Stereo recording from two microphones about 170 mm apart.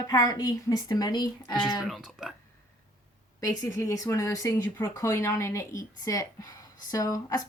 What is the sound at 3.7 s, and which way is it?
A woman's voice, 20° left (ahead or behind).